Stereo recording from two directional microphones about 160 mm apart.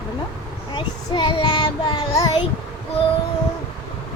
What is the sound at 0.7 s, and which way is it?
Child singing, 30° left (ahead or behind).